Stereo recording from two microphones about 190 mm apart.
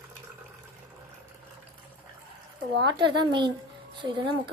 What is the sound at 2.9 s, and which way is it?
Speech, 25° right (ahead or behind).